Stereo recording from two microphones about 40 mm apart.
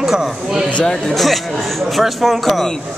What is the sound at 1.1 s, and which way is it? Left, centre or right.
Speech, centre.